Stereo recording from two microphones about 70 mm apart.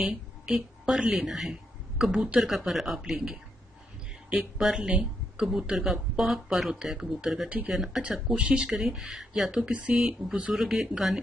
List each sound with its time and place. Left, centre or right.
0.0 s speech: centre
7.4 s speech: centre
7.7 s speech: centre